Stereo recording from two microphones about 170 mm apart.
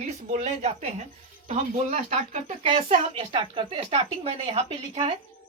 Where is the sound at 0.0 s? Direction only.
40° right (ahead or behind).